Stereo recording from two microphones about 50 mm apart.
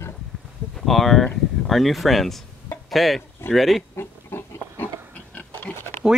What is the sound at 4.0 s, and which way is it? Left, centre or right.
Pig, left.